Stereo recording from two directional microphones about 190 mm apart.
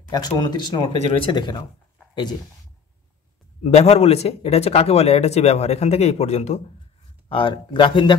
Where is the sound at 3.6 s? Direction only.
35° left (ahead or behind).